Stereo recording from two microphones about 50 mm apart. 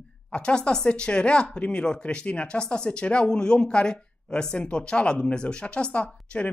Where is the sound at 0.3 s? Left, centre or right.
Left.